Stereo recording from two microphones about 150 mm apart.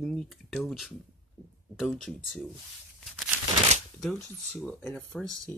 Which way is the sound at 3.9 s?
5° left (ahead or behind).